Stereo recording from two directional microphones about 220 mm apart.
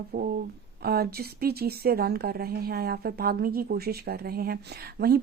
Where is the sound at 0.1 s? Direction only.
45° right (ahead or behind).